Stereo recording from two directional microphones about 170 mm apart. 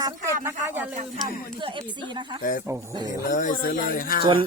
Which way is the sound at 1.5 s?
30° right (ahead or behind).